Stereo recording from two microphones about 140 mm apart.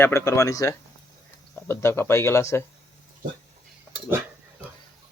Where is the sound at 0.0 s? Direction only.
20° left (ahead or behind).